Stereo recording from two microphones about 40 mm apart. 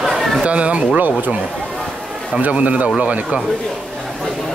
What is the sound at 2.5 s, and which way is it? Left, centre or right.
Speech, right.